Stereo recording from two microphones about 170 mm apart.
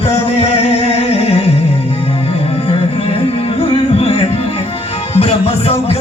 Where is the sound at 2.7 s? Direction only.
35° left (ahead or behind).